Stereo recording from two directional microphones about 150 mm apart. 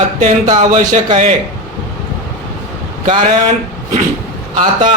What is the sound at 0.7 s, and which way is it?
Speech, 45° right (ahead or behind).